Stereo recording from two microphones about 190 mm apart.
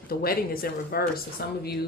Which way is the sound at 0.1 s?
50° left (ahead or behind).